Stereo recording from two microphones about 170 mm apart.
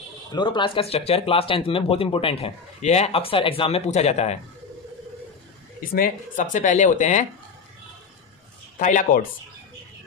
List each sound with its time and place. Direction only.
0.3 s speech: 25° left (ahead or behind)
5.8 s speech: 55° left (ahead or behind)
8.7 s speech: 50° left (ahead or behind)